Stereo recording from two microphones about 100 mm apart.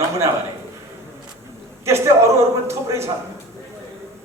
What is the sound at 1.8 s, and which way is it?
A man's voice, 25° right (ahead or behind).